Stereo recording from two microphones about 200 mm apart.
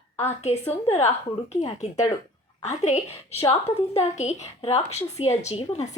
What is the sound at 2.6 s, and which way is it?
A woman's voice, 35° left (ahead or behind).